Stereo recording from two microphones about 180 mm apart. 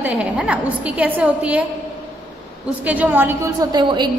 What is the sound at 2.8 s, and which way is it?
A woman's voice, 10° right (ahead or behind).